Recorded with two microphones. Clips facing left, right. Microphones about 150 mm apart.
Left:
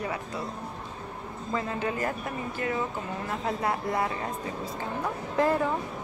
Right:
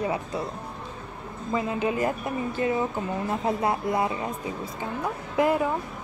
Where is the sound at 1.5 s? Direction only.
15° right (ahead or behind).